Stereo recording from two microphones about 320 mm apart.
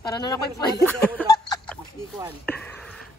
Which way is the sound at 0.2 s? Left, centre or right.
Centre.